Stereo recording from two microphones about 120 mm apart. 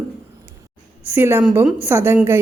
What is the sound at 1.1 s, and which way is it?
Speech, 20° right (ahead or behind).